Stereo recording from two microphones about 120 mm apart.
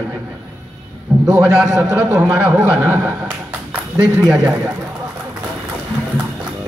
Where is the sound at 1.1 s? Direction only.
40° right (ahead or behind).